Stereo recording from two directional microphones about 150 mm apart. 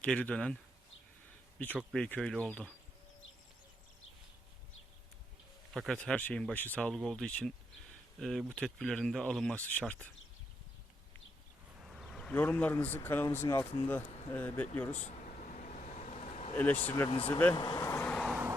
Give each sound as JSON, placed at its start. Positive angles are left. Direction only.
{"t": 0.0, "sound": "speech", "side_deg": 10}
{"t": 5.7, "sound": "speech", "side_deg": 0}
{"t": 11.8, "sound": "speech", "side_deg": 0}
{"t": 14.9, "sound": "a sound", "side_deg": 55}
{"t": 17.2, "sound": "speech", "side_deg": 10}
{"t": 17.5, "sound": "speech", "side_deg": 30}
{"t": 17.7, "sound": "vehicle", "side_deg": 15}